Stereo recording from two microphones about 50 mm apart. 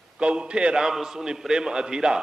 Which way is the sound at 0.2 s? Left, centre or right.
Centre.